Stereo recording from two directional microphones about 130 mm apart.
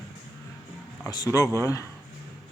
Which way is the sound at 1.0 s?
30° left (ahead or behind).